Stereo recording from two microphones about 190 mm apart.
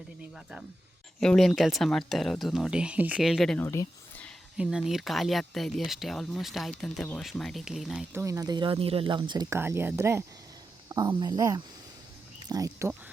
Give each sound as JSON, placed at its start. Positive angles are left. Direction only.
{"t": 1.2, "sound": "speech", "side_deg": 5}
{"t": 3.6, "sound": "a sound", "side_deg": 15}
{"t": 4.5, "sound": "speech", "side_deg": -5}
{"t": 8.1, "sound": "speech", "side_deg": -15}